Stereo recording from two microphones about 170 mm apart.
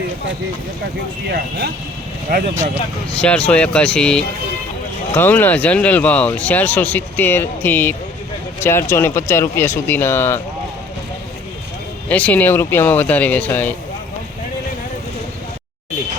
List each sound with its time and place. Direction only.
1.3 s speech: 75° right (ahead or behind)
2.3 s speech: 50° right (ahead or behind)
3.2 s speech: 10° left (ahead or behind)
12.0 s speech: 10° left (ahead or behind)